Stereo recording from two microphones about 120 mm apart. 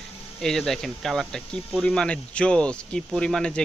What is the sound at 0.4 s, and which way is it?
Speech, 5° left (ahead or behind).